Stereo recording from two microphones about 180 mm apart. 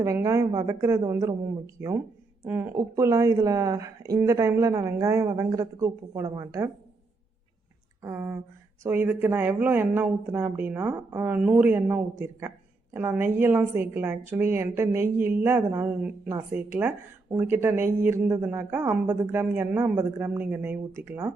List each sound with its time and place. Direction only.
0.0 s speech: 15° right (ahead or behind)
2.4 s speech: 15° right (ahead or behind)
8.0 s speech: 10° right (ahead or behind)